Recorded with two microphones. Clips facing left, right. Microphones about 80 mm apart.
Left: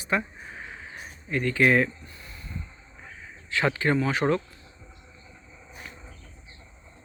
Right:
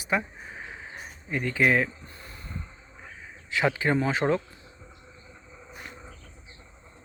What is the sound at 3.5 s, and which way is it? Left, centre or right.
Speech, centre.